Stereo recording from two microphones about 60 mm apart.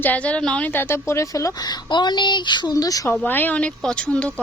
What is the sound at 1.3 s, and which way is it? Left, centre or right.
Speech, left.